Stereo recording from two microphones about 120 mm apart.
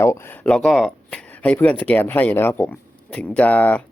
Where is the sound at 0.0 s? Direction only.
20° left (ahead or behind).